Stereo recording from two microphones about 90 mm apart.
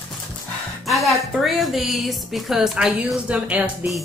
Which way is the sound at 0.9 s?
Centre (ahead or behind).